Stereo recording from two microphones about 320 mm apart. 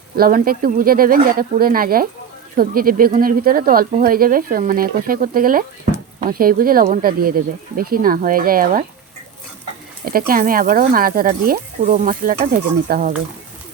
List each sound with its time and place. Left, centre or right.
0.2 s speech: right
10.1 s speech: right